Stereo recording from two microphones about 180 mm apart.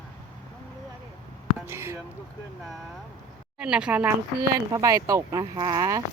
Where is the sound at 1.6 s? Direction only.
15° right (ahead or behind).